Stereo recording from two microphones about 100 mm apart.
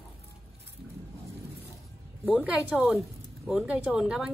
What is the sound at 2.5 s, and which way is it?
Speech, 5° right (ahead or behind).